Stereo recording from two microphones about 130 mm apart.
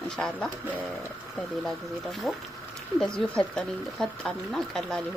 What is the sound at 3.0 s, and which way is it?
Speech, 5° left (ahead or behind).